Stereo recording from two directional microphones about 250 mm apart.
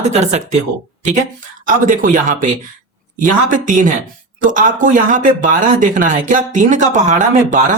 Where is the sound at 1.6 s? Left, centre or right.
Right.